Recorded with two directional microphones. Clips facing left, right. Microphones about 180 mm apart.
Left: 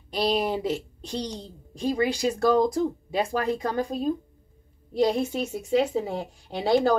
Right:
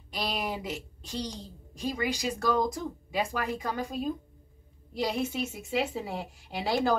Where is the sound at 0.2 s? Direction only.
35° left (ahead or behind).